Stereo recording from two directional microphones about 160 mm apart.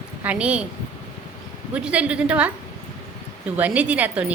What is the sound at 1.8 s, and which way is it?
Speech, 5° right (ahead or behind).